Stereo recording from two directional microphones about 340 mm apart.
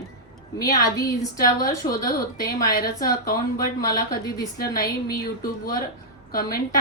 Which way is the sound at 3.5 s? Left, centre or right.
Centre.